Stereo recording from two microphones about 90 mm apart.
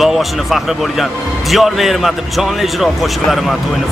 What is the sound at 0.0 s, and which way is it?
A man's voice, centre (ahead or behind).